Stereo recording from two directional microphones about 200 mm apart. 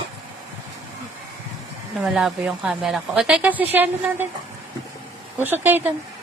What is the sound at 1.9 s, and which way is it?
A woman's voice, centre (ahead or behind).